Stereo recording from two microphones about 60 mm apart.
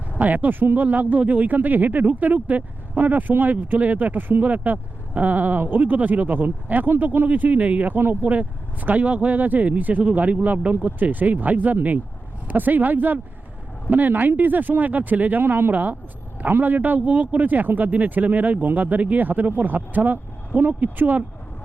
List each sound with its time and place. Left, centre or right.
0.2 s speech: right
7.3 s speech: right